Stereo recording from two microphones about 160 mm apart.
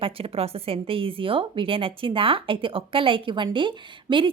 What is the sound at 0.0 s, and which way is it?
Speech, 35° right (ahead or behind).